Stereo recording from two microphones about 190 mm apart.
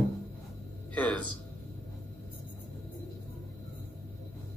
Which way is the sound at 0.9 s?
5° left (ahead or behind).